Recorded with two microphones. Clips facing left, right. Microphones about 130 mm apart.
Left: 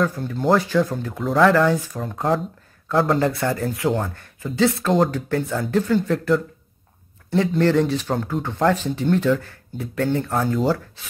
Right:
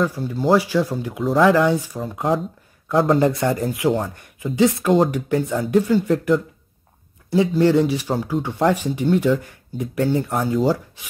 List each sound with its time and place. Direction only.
0.0 s speech: 10° right (ahead or behind)
3.2 s speech: 20° right (ahead or behind)
7.2 s speech: 10° right (ahead or behind)